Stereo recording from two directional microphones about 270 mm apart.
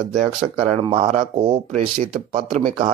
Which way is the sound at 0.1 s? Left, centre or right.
Right.